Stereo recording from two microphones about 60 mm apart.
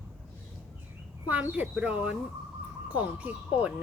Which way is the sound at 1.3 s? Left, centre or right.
Right.